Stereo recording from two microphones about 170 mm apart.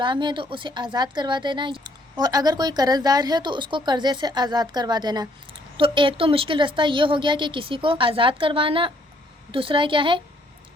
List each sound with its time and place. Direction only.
0.0 s a woman's voice: 25° right (ahead or behind)